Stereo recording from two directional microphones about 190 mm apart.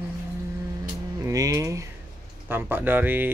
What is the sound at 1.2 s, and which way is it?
Speech, 20° right (ahead or behind).